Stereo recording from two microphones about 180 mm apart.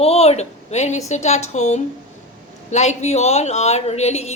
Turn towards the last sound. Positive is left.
turn(degrees=35)  # may be behind; listen again after turning